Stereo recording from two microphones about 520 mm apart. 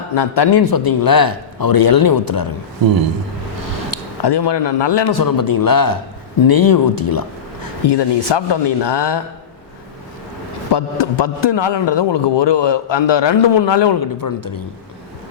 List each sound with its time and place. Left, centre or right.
0.1 s a man's voice: left
3.9 s a man's voice: left
7.9 s a man's voice: left
10.7 s a man's voice: left